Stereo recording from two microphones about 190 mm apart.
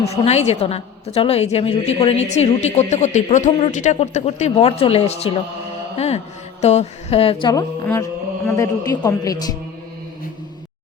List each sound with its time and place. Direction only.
0.0 s a woman's voice: 35° left (ahead or behind); by 9.6 s 20° left (ahead or behind)